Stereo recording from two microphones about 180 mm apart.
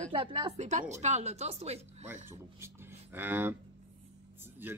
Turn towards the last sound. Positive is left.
turn(degrees=-10)  # may be behind; listen again after turning